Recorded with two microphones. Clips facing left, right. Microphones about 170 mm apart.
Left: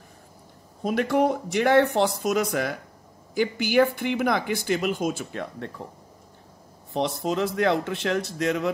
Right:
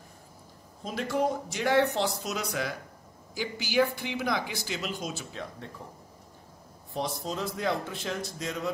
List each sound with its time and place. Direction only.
0.8 s speech: 60° left (ahead or behind)
6.9 s a man's voice: 75° left (ahead or behind)